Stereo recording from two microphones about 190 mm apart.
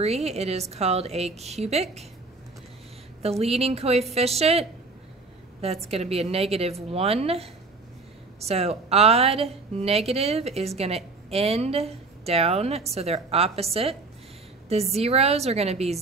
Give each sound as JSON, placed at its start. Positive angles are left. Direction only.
{"t": 0.0, "sound": "a woman's voice", "side_deg": -35}
{"t": 3.2, "sound": "a woman's voice", "side_deg": -30}
{"t": 15.0, "sound": "a woman's voice", "side_deg": -35}